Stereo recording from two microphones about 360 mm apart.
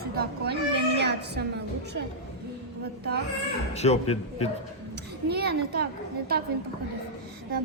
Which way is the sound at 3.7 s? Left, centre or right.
Centre.